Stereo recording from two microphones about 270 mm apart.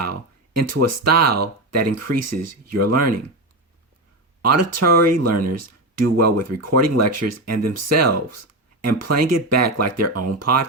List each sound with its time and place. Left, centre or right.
0.0 s speech: right
4.4 s speech: right